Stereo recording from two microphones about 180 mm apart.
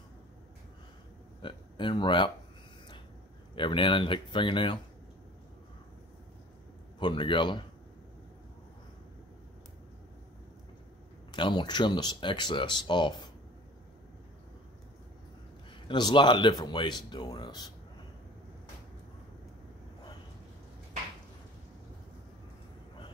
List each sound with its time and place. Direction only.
1.4 s speech: 25° left (ahead or behind)
3.5 s speech: 25° left (ahead or behind)
7.0 s speech: 25° left (ahead or behind)
11.3 s speech: 25° left (ahead or behind)
15.9 s speech: 25° left (ahead or behind)